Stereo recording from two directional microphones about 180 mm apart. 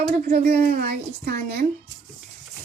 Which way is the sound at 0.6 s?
55° right (ahead or behind).